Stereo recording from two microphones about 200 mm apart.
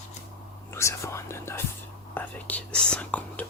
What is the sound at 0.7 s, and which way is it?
Whispering, 15° left (ahead or behind).